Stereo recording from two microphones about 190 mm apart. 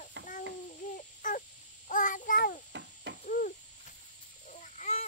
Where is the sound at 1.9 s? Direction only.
45° left (ahead or behind).